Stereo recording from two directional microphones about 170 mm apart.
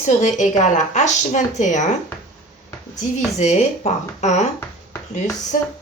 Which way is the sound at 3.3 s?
40° left (ahead or behind).